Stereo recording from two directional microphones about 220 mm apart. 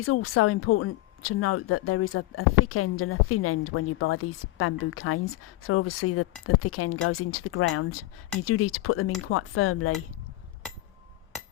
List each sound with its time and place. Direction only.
0.0 s a woman's voice: 70° left (ahead or behind)